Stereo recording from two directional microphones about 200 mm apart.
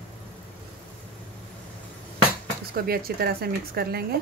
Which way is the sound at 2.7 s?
50° right (ahead or behind).